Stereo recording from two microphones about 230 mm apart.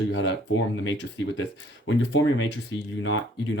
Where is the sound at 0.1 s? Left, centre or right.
Left.